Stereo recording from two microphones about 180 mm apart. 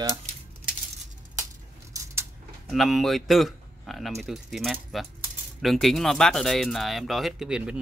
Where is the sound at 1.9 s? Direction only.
20° right (ahead or behind).